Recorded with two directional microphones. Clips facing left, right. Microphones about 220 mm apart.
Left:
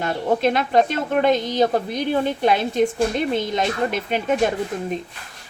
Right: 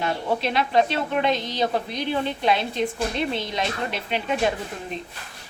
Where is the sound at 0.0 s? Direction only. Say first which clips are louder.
Left 5 dB; 50° left (ahead or behind).